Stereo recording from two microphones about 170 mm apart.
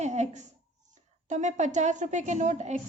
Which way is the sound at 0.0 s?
40° right (ahead or behind).